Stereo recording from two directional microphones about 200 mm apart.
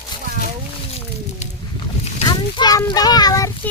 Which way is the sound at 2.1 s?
20° left (ahead or behind).